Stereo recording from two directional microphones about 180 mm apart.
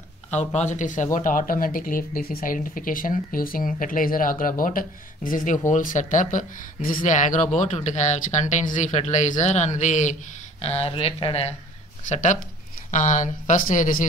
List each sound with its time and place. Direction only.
0.3 s speech: 40° left (ahead or behind)
12.1 s speech: 45° left (ahead or behind)